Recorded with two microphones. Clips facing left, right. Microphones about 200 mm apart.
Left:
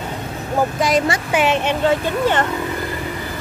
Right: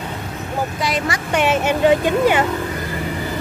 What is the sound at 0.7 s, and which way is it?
Speech, 45° left (ahead or behind).